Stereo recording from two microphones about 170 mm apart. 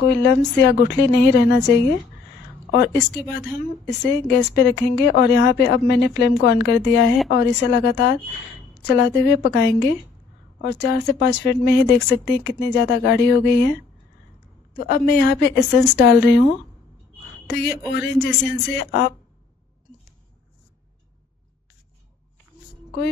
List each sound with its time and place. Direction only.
0.0 s a woman's voice: 90° left
2.7 s a woman's voice: 75° left (ahead or behind)
3.4 s a woman's voice: 5° left (ahead or behind)
4.3 s a woman's voice: 90° left
14.7 s a woman's voice: 60° left (ahead or behind)
17.5 s a woman's voice: 75° left (ahead or behind)